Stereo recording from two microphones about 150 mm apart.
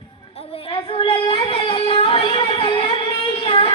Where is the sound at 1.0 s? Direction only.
40° left (ahead or behind).